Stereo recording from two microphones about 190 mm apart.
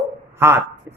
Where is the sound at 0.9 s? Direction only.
15° right (ahead or behind).